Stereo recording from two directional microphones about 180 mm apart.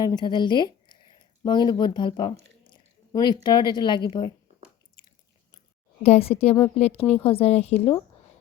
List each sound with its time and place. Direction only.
0.0 s speech: 20° left (ahead or behind)
6.0 s a woman's voice: 35° left (ahead or behind)